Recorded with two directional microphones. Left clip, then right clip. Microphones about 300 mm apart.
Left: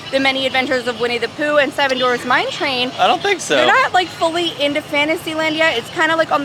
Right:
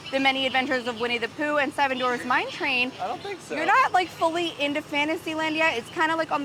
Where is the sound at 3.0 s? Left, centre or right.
Left.